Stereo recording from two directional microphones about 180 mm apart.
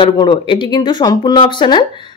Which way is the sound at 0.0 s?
25° left (ahead or behind).